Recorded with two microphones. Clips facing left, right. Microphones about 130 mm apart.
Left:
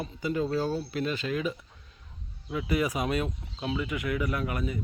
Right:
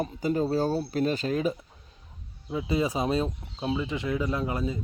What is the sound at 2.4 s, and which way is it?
A man's voice, 25° right (ahead or behind).